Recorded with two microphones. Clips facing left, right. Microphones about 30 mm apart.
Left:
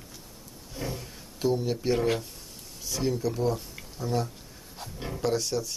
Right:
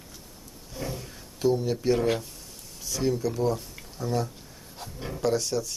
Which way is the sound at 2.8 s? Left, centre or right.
Centre.